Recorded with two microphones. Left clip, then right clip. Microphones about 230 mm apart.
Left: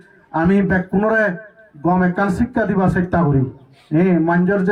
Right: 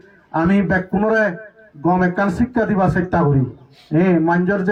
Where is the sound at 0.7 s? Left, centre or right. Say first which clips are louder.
Even; right.